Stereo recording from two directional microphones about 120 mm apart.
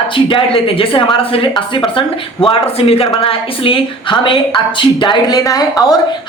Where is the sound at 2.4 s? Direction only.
55° left (ahead or behind).